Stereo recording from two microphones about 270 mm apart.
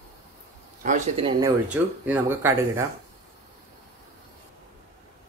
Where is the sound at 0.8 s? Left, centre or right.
Right.